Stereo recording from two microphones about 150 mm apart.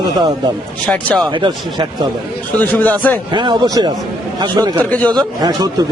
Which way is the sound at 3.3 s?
30° right (ahead or behind).